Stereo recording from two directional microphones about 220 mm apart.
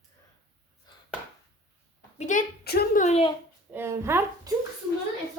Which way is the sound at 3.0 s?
30° left (ahead or behind).